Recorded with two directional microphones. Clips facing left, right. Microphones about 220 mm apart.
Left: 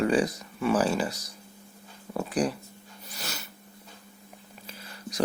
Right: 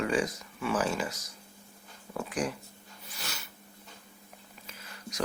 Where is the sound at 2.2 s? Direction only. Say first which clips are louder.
Left 5 dB; 35° left (ahead or behind).